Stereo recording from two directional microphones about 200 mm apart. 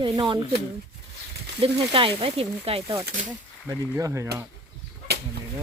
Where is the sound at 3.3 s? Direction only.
10° right (ahead or behind).